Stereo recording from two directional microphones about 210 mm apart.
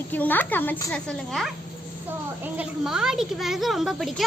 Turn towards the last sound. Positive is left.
turn(degrees=0)  # may be behind; listen again after turning